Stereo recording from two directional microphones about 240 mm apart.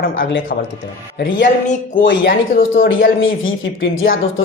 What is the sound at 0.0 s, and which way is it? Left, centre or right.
Speech, left.